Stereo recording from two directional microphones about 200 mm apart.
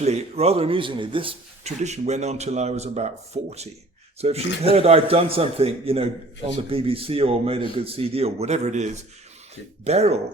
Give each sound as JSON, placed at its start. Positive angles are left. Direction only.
{"t": 0.0, "sound": "speech", "side_deg": -35}